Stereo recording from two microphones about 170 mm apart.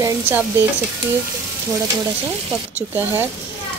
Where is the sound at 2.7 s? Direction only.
10° right (ahead or behind).